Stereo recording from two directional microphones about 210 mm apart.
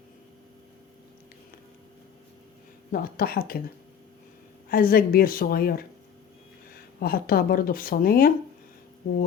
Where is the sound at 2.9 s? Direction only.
45° left (ahead or behind).